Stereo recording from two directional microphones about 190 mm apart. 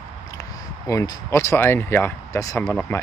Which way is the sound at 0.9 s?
15° left (ahead or behind).